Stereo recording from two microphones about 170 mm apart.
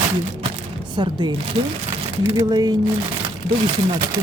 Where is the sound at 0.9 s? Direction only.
25° right (ahead or behind).